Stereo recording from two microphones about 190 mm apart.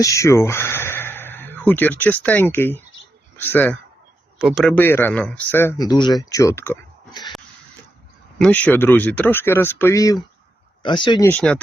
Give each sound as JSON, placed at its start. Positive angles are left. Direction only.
{"t": 0.0, "sound": "speech", "side_deg": 15}
{"t": 4.4, "sound": "speech", "side_deg": 0}
{"t": 4.8, "sound": "speech", "side_deg": 10}
{"t": 8.4, "sound": "speech", "side_deg": 10}
{"t": 11.3, "sound": "speech", "side_deg": 5}